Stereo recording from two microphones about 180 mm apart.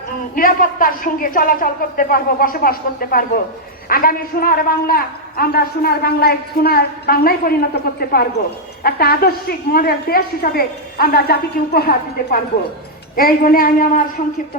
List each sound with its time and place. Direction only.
0.3 s a man's voice: 50° left (ahead or behind)